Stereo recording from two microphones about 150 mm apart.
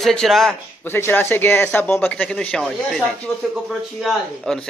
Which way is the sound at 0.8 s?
15° left (ahead or behind).